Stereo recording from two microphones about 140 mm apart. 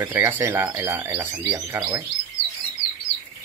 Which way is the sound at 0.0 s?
15° right (ahead or behind).